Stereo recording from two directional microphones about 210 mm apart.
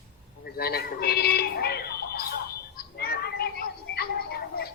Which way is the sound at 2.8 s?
45° left (ahead or behind).